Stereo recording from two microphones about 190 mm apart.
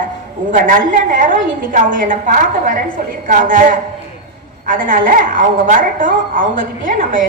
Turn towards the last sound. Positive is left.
turn(degrees=-45)  # may be behind; listen again after turning